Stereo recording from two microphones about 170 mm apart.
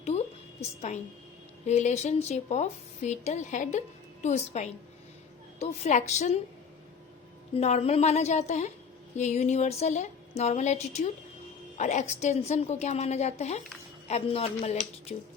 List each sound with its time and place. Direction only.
0.0 s a sound: 40° left (ahead or behind)
1.6 s speech: 40° left (ahead or behind)
7.5 s speech: 40° left (ahead or behind)